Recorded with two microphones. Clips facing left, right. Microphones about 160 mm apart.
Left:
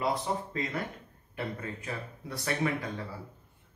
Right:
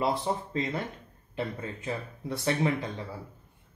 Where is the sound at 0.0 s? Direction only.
30° right (ahead or behind).